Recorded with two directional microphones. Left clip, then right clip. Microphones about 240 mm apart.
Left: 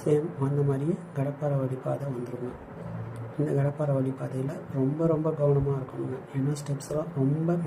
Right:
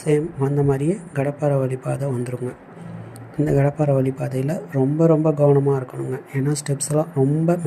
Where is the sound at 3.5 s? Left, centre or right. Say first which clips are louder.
Right 10 dB; right.